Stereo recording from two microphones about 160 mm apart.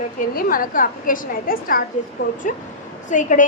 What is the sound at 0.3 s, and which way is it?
A woman's voice, 65° left (ahead or behind).